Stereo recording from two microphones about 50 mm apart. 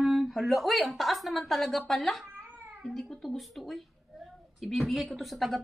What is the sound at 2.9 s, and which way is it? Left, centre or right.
A woman's voice, centre.